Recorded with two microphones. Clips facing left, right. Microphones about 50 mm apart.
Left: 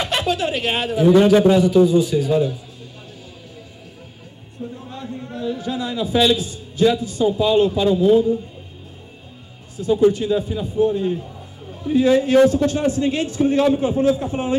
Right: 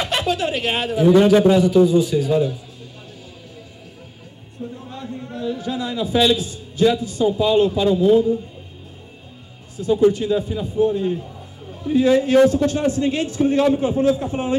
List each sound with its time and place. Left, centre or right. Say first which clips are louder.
0.0 s a man's voice: even; left
5.0 s a sound: even; left
5.5 s a man's voice: even; left
9.8 s a man's voice: even; left